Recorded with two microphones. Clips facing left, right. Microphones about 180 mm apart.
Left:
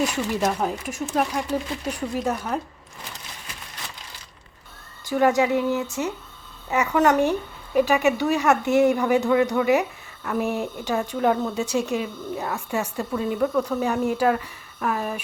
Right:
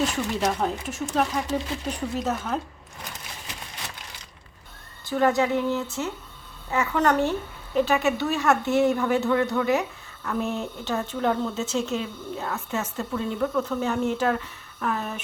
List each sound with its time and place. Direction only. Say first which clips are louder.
0.0 s a woman's voice: left 2 dB; 10° left (ahead or behind)
5.0 s a woman's voice: left 2 dB; 15° left (ahead or behind)